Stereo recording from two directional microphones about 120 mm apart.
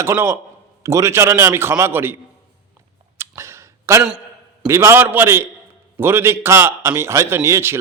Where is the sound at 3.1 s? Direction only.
20° right (ahead or behind).